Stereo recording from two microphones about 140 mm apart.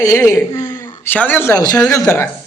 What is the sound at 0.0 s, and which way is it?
A man's voice, 25° left (ahead or behind).